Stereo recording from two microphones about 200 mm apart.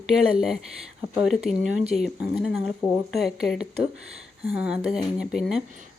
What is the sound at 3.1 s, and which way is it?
Speech, centre (ahead or behind).